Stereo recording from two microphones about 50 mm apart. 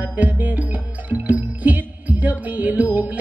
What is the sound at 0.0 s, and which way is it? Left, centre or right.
Music, right.